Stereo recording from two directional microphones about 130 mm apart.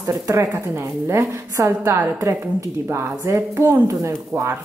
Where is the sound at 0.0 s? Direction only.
20° right (ahead or behind).